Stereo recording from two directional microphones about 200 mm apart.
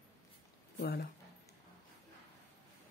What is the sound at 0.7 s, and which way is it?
Speech, 50° left (ahead or behind).